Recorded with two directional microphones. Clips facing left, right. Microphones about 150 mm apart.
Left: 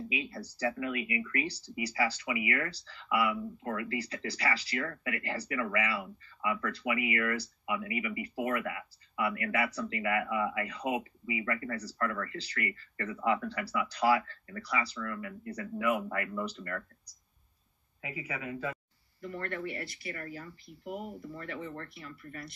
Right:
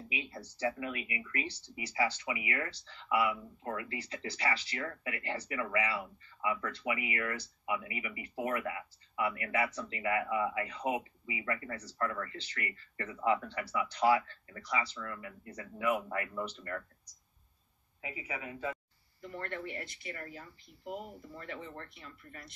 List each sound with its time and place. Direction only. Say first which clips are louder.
0.1 s speech: left 5 dB; 25° right (ahead or behind)
18.0 s speech: left 3 dB; 20° right (ahead or behind)